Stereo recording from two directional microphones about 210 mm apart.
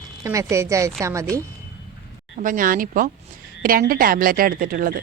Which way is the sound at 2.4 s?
40° right (ahead or behind).